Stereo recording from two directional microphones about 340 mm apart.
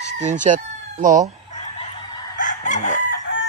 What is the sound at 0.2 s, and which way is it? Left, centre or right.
Chicken, right.